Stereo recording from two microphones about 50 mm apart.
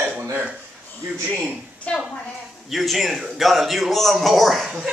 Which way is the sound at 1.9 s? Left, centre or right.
Left.